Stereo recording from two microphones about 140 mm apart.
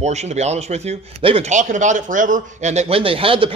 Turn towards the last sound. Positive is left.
turn(degrees=-40)  # may be behind; listen again after turning